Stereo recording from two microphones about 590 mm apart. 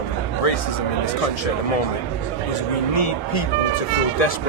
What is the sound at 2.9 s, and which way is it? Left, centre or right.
Speech, left.